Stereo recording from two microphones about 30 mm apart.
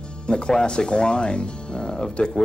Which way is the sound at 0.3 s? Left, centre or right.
Left.